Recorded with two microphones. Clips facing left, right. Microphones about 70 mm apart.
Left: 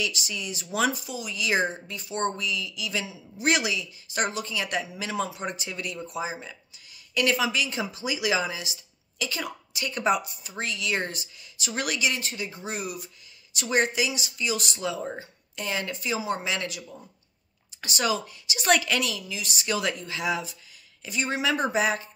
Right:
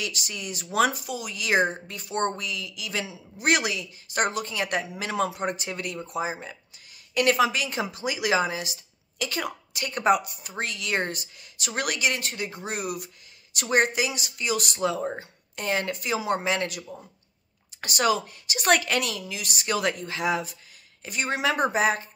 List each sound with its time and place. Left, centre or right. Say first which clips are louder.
0.0 s speech: left 2 dB; right